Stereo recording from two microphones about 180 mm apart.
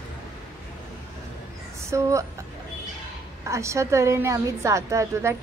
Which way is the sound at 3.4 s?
15° right (ahead or behind).